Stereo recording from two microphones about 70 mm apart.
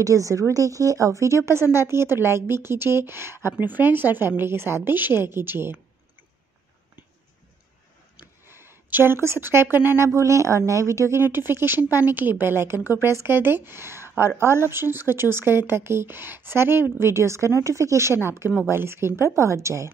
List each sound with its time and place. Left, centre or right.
0.0 s speech: right
8.5 s speech: right